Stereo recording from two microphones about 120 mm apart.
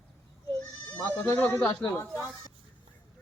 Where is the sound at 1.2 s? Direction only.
20° left (ahead or behind).